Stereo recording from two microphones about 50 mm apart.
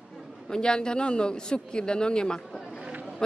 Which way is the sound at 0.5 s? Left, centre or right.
Centre.